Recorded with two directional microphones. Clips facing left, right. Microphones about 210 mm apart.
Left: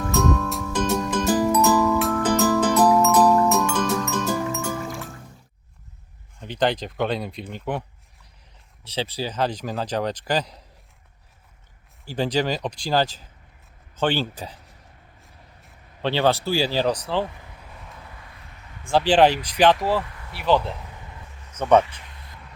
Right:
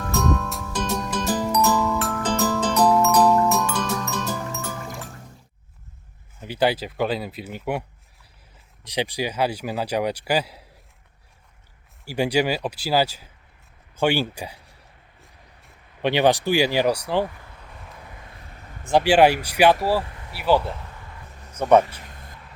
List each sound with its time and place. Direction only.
0.0 s music: 5° left (ahead or behind)
6.4 s speech: 10° right (ahead or behind)
12.0 s speech: 10° right (ahead or behind)
16.0 s speech: 15° right (ahead or behind)
18.9 s speech: 10° right (ahead or behind)
21.8 s a sound: 40° right (ahead or behind)